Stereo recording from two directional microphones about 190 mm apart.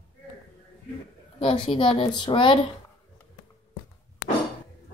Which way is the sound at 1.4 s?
25° left (ahead or behind).